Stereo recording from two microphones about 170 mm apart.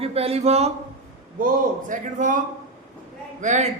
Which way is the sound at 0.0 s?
35° right (ahead or behind).